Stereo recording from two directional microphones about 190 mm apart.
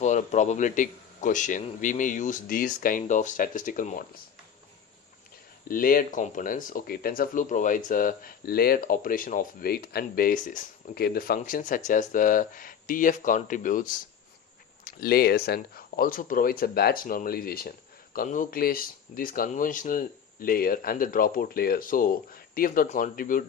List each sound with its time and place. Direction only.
0.0 s speech: 40° left (ahead or behind)
5.6 s speech: 50° left (ahead or behind)
14.8 s speech: 55° left (ahead or behind)